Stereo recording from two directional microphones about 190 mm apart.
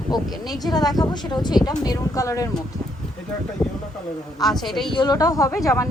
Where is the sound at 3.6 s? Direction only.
5° left (ahead or behind).